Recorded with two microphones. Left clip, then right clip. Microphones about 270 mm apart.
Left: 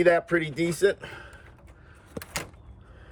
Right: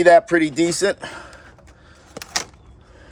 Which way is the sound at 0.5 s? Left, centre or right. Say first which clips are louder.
Right 5 dB; right.